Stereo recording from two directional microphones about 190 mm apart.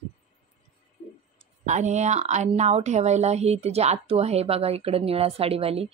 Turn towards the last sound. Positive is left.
turn(degrees=-30)  # may be behind; listen again after turning